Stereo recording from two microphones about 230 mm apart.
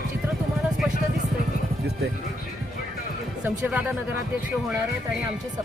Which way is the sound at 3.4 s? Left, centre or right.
Centre.